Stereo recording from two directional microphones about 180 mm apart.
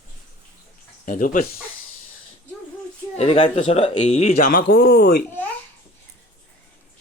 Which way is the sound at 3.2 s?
30° left (ahead or behind).